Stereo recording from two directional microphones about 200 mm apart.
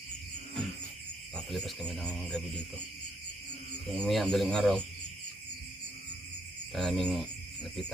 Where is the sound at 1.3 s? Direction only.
5° left (ahead or behind).